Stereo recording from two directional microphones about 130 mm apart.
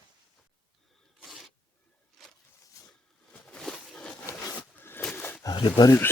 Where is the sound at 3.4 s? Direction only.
5° left (ahead or behind).